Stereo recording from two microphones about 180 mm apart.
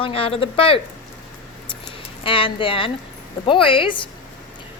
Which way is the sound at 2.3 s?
30° left (ahead or behind).